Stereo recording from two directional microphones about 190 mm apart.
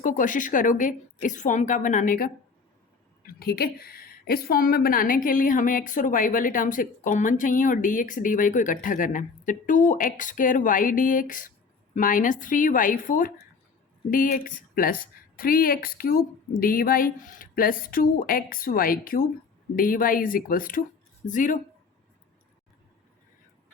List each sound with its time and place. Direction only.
0.0 s a woman's voice: 45° left (ahead or behind)